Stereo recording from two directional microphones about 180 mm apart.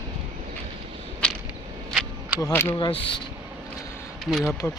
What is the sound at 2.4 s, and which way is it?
Speech, 20° left (ahead or behind).